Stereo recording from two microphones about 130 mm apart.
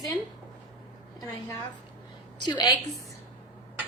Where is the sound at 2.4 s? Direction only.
30° left (ahead or behind).